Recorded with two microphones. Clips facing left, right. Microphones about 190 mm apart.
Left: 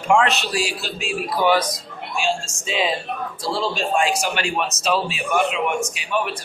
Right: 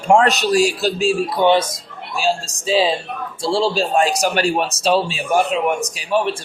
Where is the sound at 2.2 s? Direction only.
35° right (ahead or behind).